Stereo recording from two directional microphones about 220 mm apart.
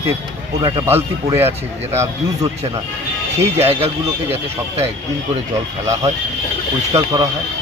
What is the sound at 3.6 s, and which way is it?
Speech, 25° right (ahead or behind).